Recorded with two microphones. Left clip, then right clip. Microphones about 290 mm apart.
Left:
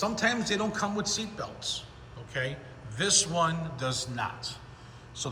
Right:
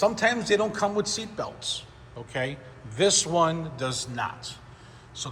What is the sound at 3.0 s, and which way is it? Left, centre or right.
Speech, centre.